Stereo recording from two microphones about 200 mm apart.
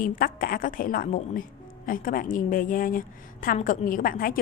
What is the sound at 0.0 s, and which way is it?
A woman's voice, 45° left (ahead or behind).